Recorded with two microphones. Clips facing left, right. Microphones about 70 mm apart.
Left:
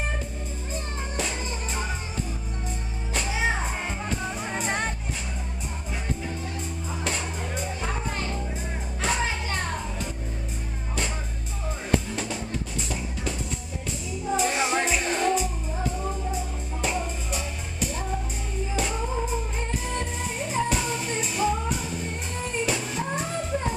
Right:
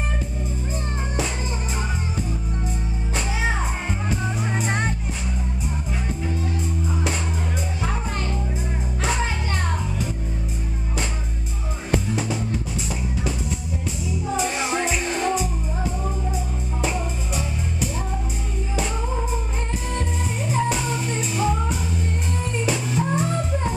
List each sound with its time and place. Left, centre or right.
4.1 s music: centre
14.2 s music: centre
16.8 s music: centre
20.0 s music: centre